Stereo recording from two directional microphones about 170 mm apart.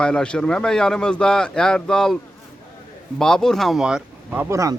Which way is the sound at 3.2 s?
5° left (ahead or behind).